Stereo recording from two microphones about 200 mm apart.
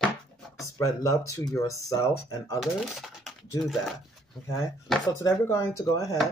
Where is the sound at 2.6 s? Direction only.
Centre (ahead or behind).